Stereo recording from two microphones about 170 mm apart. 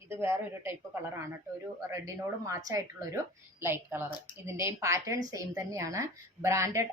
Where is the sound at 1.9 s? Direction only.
20° right (ahead or behind).